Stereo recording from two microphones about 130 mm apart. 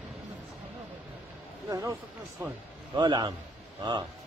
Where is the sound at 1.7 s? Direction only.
25° right (ahead or behind).